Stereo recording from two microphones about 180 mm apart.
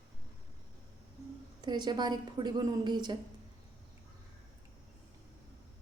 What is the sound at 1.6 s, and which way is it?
A woman's voice, 25° right (ahead or behind).